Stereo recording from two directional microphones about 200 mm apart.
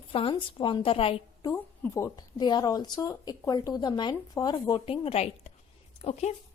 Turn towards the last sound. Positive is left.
turn(degrees=35)  # may be behind; listen again after turning